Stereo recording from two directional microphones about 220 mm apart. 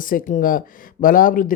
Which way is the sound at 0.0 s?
35° left (ahead or behind).